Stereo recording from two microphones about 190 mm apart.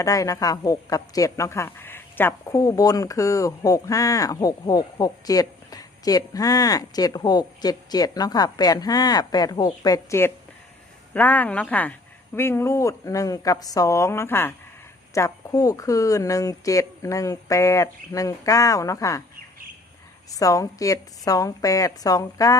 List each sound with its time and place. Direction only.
0.0 s a woman's voice: 15° left (ahead or behind)
20.3 s speech: 20° left (ahead or behind)